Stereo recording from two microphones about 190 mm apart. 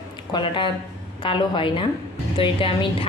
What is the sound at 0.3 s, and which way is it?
A woman's voice, 25° left (ahead or behind).